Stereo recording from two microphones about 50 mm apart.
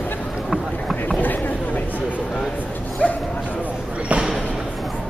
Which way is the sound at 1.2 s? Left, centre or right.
Left.